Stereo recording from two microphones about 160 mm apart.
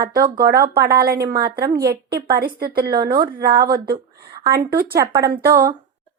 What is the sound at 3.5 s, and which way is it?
A woman's voice, 70° right (ahead or behind).